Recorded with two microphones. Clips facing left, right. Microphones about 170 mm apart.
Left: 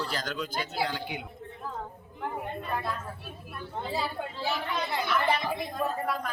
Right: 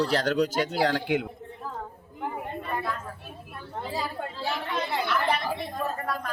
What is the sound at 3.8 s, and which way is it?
Speech, 5° left (ahead or behind).